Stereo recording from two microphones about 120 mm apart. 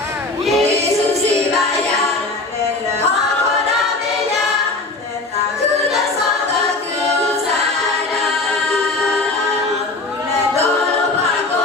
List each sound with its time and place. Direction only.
0.6 s music: 65° right (ahead or behind)